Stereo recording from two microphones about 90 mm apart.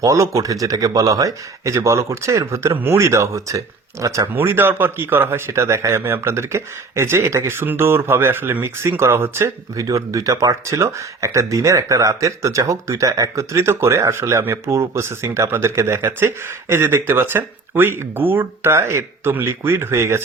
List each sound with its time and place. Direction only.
0.0 s speech: 35° right (ahead or behind)
4.3 s speech: 20° right (ahead or behind)
9.7 s speech: 40° right (ahead or behind)